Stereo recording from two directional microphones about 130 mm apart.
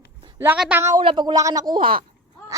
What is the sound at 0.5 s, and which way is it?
Speech, 5° right (ahead or behind).